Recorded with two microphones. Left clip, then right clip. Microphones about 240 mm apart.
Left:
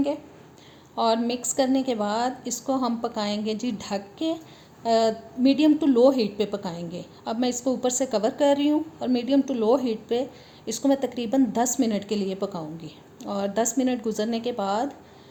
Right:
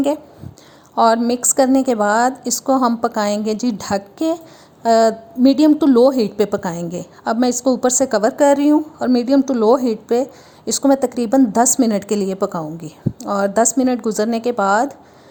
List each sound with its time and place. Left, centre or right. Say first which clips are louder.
0.9 s a woman's voice: right 9 dB; right
12.0 s a woman's voice: right 8 dB; right
12.3 s a woman's voice: right 9 dB; right
14.2 s speech: right 9 dB; centre
14.5 s a woman's voice: right 14 dB; right